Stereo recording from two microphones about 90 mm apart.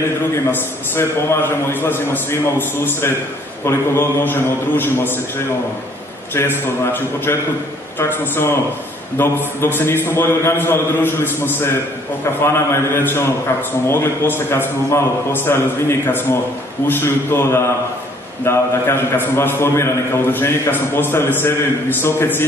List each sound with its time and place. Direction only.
0.9 s a man's voice: 25° left (ahead or behind)
6.3 s a man's voice: 25° left (ahead or behind)
12.7 s a man's voice: 25° left (ahead or behind)